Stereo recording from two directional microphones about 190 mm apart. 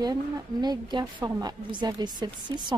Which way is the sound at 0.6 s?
20° right (ahead or behind).